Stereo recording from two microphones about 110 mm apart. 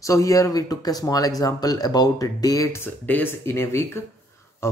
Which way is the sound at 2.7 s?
15° left (ahead or behind).